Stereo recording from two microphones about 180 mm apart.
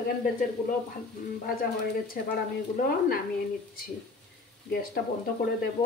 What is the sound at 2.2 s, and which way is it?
Speech, 55° left (ahead or behind).